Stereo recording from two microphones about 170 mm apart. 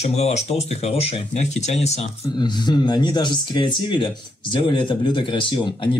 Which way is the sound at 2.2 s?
25° left (ahead or behind).